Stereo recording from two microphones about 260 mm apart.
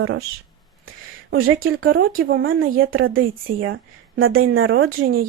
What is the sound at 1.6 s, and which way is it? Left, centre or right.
Speech, right.